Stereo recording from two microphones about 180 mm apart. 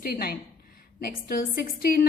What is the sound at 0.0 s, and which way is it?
A woman's voice, 55° left (ahead or behind).